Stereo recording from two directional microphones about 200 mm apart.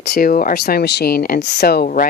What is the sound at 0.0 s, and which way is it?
A woman's voice, 50° left (ahead or behind).